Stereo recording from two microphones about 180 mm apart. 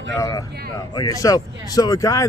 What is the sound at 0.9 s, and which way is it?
Speech, 20° left (ahead or behind).